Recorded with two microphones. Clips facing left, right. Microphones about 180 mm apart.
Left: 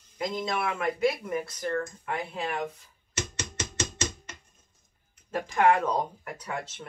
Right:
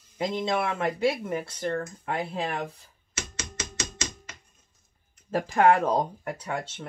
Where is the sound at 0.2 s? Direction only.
30° right (ahead or behind).